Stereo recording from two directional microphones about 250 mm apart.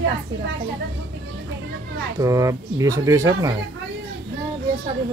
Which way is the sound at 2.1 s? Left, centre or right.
Centre.